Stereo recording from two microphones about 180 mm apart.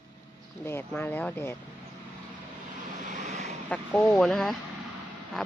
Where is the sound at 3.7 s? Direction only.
5° left (ahead or behind).